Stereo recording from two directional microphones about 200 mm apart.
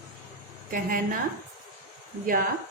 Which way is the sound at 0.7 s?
45° right (ahead or behind).